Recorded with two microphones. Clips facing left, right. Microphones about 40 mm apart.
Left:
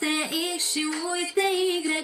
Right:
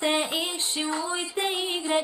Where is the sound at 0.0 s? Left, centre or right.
Right.